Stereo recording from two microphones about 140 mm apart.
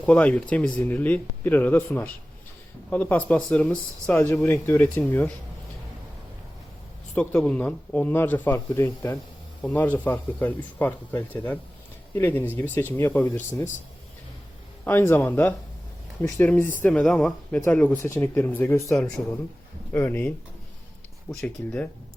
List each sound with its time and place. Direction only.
0.0 s speech: 10° left (ahead or behind)
4.1 s speech: 20° left (ahead or behind)
7.2 s speech: 5° left (ahead or behind)
14.8 s speech: 15° left (ahead or behind)
18.9 s speech: 5° left (ahead or behind)
21.4 s speech: 10° left (ahead or behind)